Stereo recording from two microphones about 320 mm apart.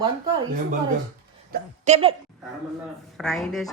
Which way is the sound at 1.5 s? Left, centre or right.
Centre.